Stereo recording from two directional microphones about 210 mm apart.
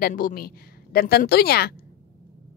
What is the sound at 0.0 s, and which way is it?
A woman's voice, 45° left (ahead or behind).